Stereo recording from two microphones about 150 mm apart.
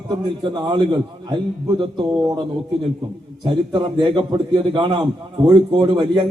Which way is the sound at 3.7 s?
30° right (ahead or behind).